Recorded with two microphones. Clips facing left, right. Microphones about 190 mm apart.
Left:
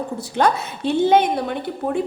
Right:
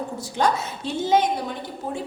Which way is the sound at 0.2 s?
60° left (ahead or behind).